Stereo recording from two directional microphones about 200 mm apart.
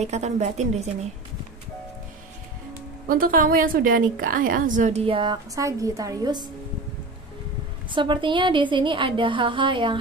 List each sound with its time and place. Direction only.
0.0 s a woman's voice: 35° right (ahead or behind)
3.1 s a woman's voice: 45° right (ahead or behind); by 6.5 s 20° right (ahead or behind)
7.9 s speech: 25° right (ahead or behind)